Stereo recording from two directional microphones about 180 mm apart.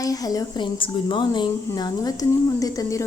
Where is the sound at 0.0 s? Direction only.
20° left (ahead or behind).